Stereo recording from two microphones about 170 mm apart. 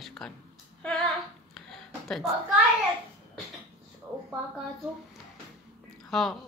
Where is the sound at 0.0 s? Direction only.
Centre (ahead or behind).